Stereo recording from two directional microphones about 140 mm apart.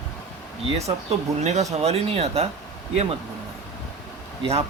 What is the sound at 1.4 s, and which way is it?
Speech, 55° right (ahead or behind).